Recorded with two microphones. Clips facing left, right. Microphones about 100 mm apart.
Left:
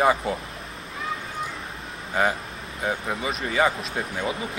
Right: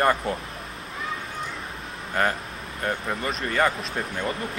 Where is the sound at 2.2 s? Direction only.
5° left (ahead or behind).